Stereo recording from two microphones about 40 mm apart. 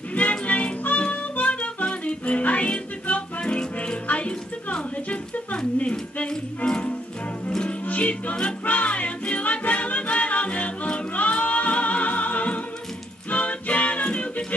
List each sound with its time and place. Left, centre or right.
0.1 s music: left
5.8 s speech: left
6.2 s music: left
7.8 s music: left